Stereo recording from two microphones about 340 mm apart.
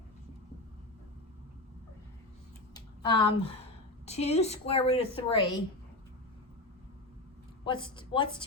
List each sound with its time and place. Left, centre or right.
2.7 s speech: centre
7.6 s speech: centre